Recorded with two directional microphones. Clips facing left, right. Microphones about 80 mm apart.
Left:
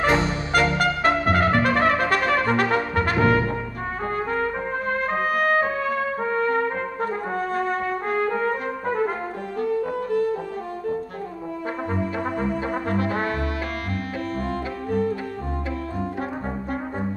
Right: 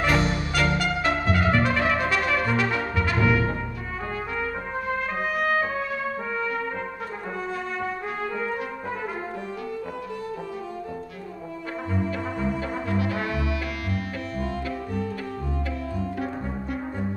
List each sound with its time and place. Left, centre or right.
0.0 s music: left
0.7 s trumpet: left
12.9 s brass instrument: left